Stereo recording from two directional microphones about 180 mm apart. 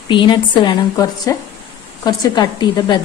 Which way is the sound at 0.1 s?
25° left (ahead or behind).